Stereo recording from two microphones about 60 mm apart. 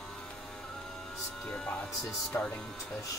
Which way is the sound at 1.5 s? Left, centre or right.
Centre.